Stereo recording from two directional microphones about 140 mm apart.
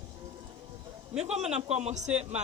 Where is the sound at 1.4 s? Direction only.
50° right (ahead or behind).